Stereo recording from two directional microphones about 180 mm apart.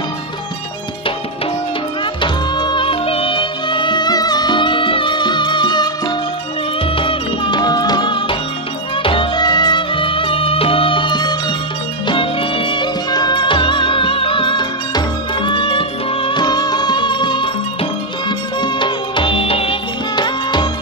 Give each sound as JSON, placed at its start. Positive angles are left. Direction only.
{"t": 2.2, "sound": "music", "side_deg": 25}
{"t": 18.6, "sound": "music", "side_deg": 25}